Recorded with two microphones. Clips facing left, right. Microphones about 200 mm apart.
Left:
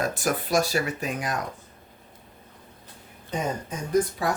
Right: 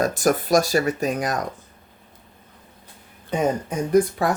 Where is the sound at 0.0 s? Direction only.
45° right (ahead or behind).